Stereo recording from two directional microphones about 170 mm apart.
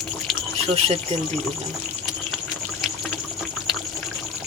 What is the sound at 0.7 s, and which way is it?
Speech, 35° right (ahead or behind).